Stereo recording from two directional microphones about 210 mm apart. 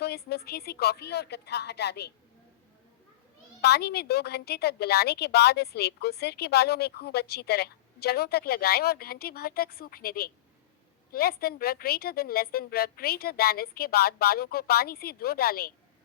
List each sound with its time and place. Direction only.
0.0 s a woman's voice: 50° left (ahead or behind)
3.6 s a woman's voice: 50° left (ahead or behind)